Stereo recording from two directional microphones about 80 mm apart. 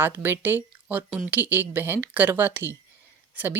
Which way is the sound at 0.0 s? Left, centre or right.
Right.